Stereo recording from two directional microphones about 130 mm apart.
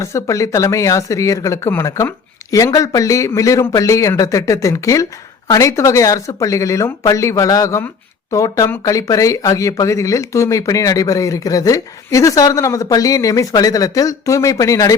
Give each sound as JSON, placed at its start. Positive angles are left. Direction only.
{"t": 0.0, "sound": "speech", "side_deg": 20}